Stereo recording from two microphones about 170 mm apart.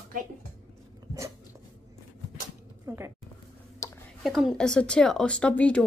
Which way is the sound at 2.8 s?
15° right (ahead or behind).